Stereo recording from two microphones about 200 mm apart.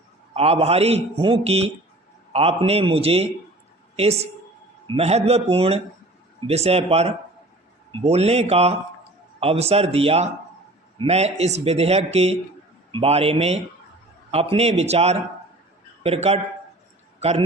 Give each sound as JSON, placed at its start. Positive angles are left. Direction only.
{"t": 0.3, "sound": "a man's voice", "side_deg": -30}